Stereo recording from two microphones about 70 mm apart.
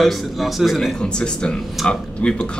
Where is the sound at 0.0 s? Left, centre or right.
Centre.